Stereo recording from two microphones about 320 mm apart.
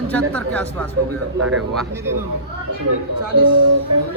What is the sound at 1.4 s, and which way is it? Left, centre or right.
Speech, right.